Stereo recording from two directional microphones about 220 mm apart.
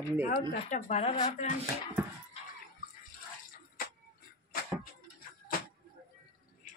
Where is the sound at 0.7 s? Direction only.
30° left (ahead or behind).